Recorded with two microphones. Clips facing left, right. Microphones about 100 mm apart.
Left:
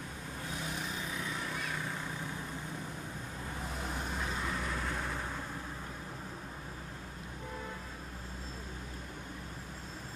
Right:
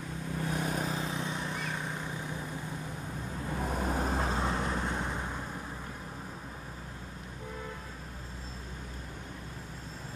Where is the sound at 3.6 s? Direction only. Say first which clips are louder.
Right 9 dB; 50° right (ahead or behind); by 5.5 s 15° right (ahead or behind).